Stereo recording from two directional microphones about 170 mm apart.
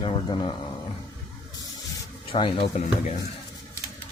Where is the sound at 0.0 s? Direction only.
30° left (ahead or behind).